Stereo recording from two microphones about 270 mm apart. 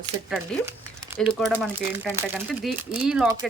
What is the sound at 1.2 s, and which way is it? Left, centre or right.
Speech, centre.